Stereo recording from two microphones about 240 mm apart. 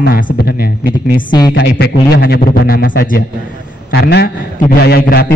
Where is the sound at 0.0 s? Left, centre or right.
Left.